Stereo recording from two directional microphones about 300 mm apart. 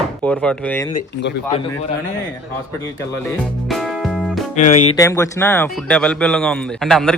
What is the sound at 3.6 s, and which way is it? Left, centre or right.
Music, centre.